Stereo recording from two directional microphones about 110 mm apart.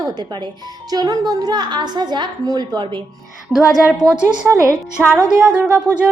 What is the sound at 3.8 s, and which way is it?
Speech, 10° right (ahead or behind).